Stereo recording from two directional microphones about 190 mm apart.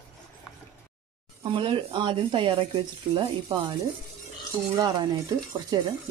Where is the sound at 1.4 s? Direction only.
25° right (ahead or behind).